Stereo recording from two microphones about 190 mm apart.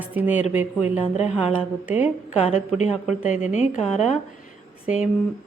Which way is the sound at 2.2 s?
40° left (ahead or behind).